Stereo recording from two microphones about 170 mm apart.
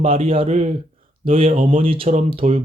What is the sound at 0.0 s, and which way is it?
Speech, 35° right (ahead or behind).